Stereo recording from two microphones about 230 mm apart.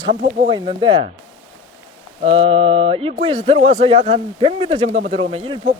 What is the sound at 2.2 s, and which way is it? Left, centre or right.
A man's voice, right.